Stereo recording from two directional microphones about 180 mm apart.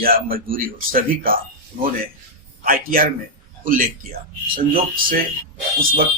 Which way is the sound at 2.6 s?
50° right (ahead or behind).